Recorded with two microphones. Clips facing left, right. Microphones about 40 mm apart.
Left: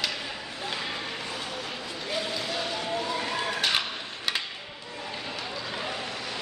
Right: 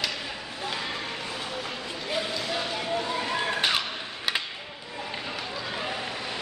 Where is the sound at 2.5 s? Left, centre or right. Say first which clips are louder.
Right 1 dB; centre.